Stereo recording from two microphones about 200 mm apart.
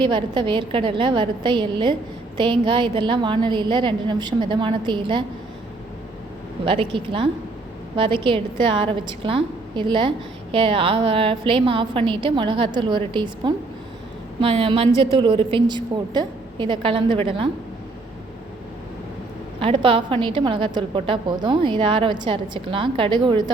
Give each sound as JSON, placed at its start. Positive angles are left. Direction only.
{"t": 0.0, "sound": "a woman's voice", "side_deg": -25}
{"t": 6.7, "sound": "a woman's voice", "side_deg": -25}
{"t": 19.5, "sound": "a woman's voice", "side_deg": -25}